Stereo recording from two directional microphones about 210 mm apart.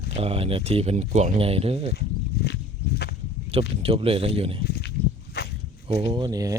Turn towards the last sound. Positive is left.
turn(degrees=-15)  # may be behind; listen again after turning